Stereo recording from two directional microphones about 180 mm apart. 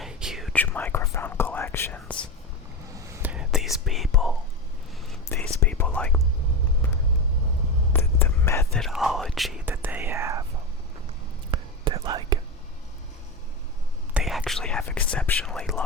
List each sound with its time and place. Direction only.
0.0 s whispering: 5° right (ahead or behind)
0.5 s whispering: 10° left (ahead or behind)
2.9 s whispering: 15° right (ahead or behind); by 6.2 s 5° left (ahead or behind)
7.9 s whispering: 15° left (ahead or behind)
8.7 s whispering: centre (ahead or behind)
9.6 s whispering: 10° right (ahead or behind)
11.5 s whispering: 25° right (ahead or behind)
14.1 s whispering: 5° right (ahead or behind)